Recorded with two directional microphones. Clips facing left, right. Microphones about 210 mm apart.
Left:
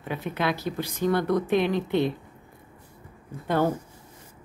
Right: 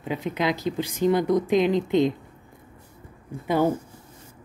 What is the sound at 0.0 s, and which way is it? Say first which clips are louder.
Speech: right 2 dB; 15° right (ahead or behind).